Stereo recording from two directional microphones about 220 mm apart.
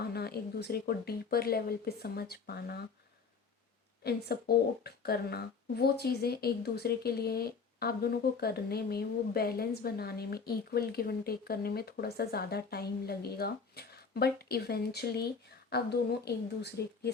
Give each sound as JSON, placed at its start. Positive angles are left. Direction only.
{"t": 0.0, "sound": "speech", "side_deg": 45}
{"t": 4.0, "sound": "speech", "side_deg": 45}